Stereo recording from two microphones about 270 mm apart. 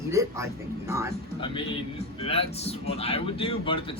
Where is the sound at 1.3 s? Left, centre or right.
Centre.